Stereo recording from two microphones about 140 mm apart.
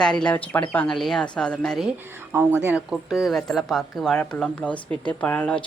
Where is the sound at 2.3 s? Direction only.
15° right (ahead or behind).